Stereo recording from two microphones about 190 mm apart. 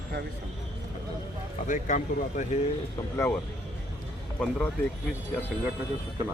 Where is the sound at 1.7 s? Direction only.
40° left (ahead or behind).